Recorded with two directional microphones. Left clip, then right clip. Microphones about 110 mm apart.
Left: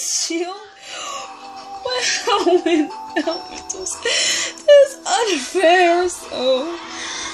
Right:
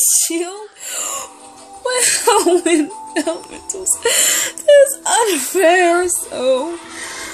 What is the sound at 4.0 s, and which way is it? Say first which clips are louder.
Speech: right 2 dB; 15° right (ahead or behind).